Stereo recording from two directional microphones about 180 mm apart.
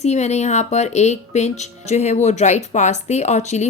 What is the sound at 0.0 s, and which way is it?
Speech, 40° left (ahead or behind).